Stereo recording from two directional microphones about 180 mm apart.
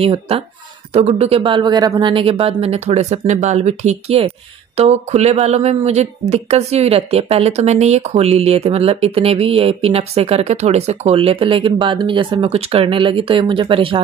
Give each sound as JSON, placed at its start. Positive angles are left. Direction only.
{"t": 0.0, "sound": "speech", "side_deg": -30}